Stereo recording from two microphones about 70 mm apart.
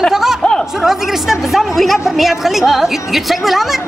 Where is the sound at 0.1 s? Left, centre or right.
Centre.